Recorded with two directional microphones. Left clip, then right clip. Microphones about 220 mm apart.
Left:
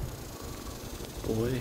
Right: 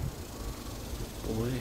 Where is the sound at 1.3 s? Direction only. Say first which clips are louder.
Left 4 dB; 25° left (ahead or behind).